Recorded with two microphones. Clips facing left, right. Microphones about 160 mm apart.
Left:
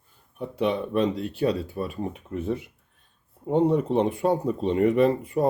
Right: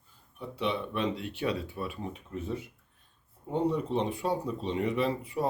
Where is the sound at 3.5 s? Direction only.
60° left (ahead or behind).